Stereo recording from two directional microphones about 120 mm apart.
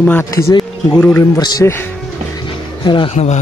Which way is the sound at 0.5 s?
40° left (ahead or behind).